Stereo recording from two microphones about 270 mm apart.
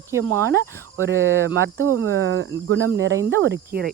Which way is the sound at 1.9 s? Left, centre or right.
Right.